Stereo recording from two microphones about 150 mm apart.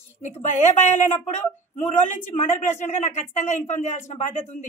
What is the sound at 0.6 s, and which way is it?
Speech, 50° left (ahead or behind).